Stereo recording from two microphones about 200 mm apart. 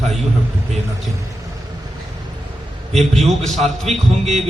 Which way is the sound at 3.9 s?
35° right (ahead or behind).